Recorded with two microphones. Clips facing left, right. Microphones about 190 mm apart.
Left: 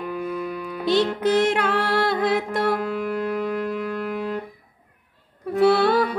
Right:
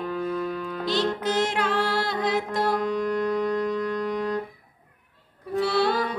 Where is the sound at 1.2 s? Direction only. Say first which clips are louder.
Left 5 dB; 60° left (ahead or behind).